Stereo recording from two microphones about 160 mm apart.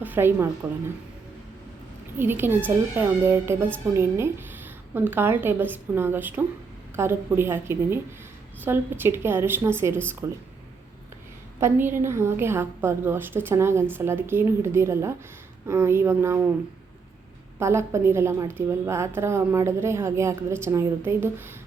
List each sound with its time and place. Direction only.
0.0 s a woman's voice: 15° right (ahead or behind)
2.1 s a woman's voice: 15° right (ahead or behind)
11.6 s a woman's voice: 15° right (ahead or behind)
17.6 s a woman's voice: 15° right (ahead or behind)